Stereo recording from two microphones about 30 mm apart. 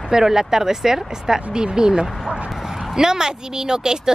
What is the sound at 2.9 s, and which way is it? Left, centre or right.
Speech, right.